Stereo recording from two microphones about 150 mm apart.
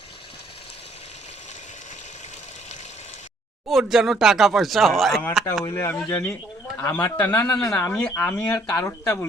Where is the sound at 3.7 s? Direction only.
Centre (ahead or behind).